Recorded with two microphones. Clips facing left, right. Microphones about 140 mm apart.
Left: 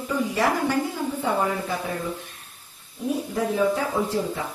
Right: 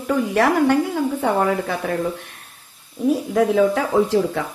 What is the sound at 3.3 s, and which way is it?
Speech, 80° right.